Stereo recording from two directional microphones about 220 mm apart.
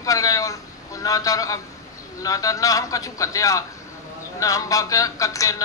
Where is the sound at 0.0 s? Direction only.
15° left (ahead or behind).